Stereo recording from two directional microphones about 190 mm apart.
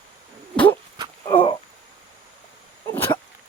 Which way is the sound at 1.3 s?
25° left (ahead or behind).